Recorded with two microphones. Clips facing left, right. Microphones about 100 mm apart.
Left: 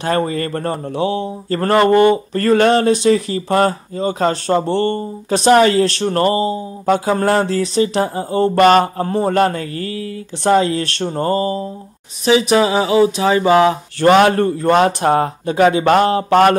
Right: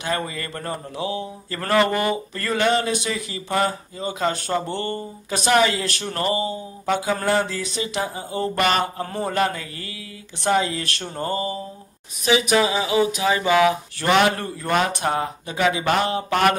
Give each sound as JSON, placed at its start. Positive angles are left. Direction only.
{"t": 0.0, "sound": "speech", "side_deg": 40}